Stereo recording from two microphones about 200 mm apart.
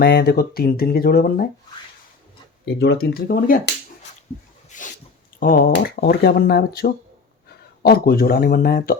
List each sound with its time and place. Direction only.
0.0 s speech: 50° left (ahead or behind)
2.7 s speech: 55° left (ahead or behind)
4.7 s dog: 40° left (ahead or behind)
5.4 s speech: 45° left (ahead or behind)